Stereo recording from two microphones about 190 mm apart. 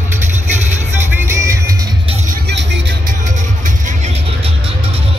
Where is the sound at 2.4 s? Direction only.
65° right (ahead or behind).